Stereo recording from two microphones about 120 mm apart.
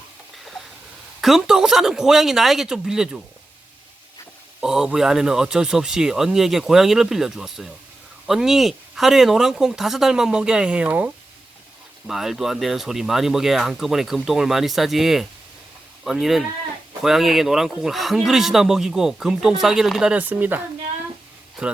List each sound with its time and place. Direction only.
1.2 s speech: 5° right (ahead or behind)
4.6 s speech: 5° right (ahead or behind)